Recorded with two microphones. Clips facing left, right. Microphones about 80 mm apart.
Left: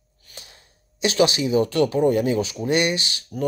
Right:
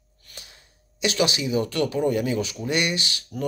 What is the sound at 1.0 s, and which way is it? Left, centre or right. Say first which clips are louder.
Speech: left 4 dB; left.